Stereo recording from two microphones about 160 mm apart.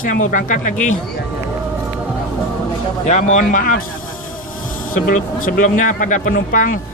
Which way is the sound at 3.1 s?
50° left (ahead or behind).